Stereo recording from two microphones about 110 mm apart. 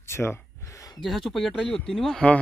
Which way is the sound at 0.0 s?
25° left (ahead or behind).